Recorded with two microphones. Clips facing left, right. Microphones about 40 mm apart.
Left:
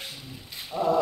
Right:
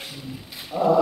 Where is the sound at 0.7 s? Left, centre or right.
Centre.